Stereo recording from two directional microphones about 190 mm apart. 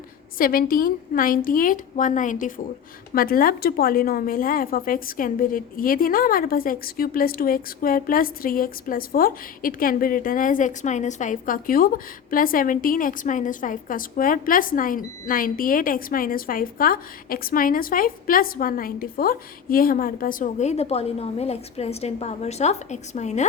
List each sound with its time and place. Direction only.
0.3 s a woman's voice: 50° left (ahead or behind)